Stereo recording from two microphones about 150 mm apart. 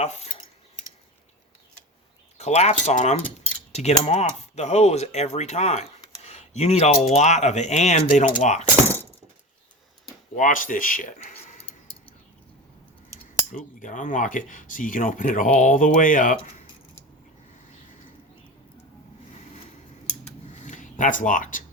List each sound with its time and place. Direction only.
0.0 s speech: 50° left (ahead or behind)
2.4 s speech: 50° left (ahead or behind)
10.3 s speech: 60° left (ahead or behind)
13.7 s speech: 60° left (ahead or behind)
20.5 s a sound: 55° left (ahead or behind)